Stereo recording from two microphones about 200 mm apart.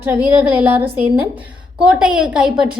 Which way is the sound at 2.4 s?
5° right (ahead or behind).